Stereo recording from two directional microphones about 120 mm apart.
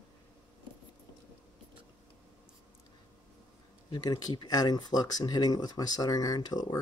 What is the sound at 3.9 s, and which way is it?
Speech, 35° left (ahead or behind).